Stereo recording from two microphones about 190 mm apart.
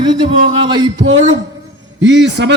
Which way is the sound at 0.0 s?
20° right (ahead or behind).